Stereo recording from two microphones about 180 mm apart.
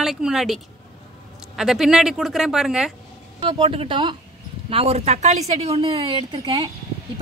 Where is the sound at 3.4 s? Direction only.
30° right (ahead or behind).